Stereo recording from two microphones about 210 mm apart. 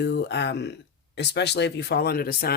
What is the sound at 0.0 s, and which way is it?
Speech, 55° left (ahead or behind).